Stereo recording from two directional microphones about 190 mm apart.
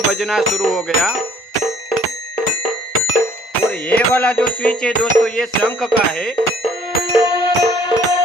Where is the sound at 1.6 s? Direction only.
Centre (ahead or behind).